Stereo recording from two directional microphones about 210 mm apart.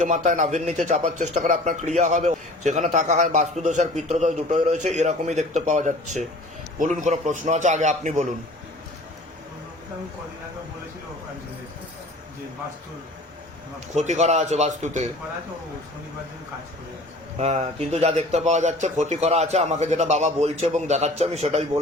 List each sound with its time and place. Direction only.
0.0 s a man's voice: 35° right (ahead or behind)
13.9 s a man's voice: 35° right (ahead or behind)
17.3 s a man's voice: 30° right (ahead or behind)